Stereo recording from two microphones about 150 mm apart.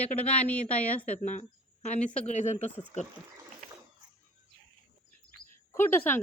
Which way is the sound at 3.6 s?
65° right (ahead or behind).